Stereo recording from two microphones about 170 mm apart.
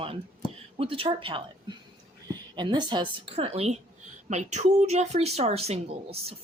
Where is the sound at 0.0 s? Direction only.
35° right (ahead or behind).